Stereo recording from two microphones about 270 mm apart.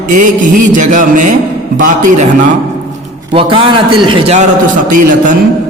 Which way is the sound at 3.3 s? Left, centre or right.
Centre.